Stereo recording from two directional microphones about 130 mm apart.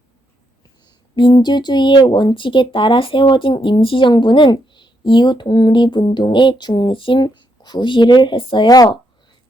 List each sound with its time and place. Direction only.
0.9 s speech: 35° left (ahead or behind)